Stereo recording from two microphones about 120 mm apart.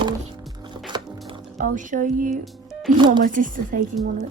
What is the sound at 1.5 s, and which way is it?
Speech, 90° right.